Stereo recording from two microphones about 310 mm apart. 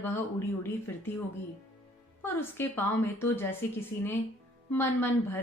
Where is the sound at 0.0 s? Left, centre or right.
Centre.